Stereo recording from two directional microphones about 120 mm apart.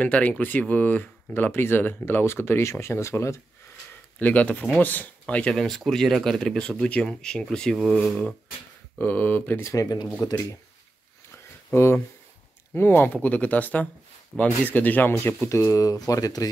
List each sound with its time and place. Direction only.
0.0 s speech: 10° left (ahead or behind)
4.2 s speech: 10° left (ahead or behind)
8.9 s speech: 15° left (ahead or behind)
9.7 s speech: 30° left (ahead or behind)
11.3 s a sound: 20° left (ahead or behind)
12.7 s speech: 15° left (ahead or behind)